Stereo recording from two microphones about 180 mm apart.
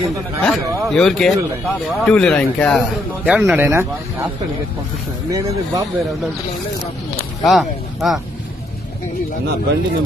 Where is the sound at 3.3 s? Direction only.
5° right (ahead or behind).